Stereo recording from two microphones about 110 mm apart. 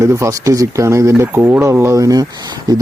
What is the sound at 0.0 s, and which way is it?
A man's voice, 25° right (ahead or behind).